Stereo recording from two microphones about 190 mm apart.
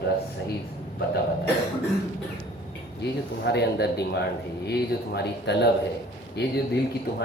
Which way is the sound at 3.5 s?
60° left (ahead or behind).